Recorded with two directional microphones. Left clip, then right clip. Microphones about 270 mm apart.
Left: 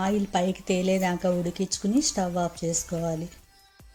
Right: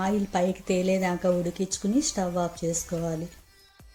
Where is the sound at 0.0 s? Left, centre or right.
Centre.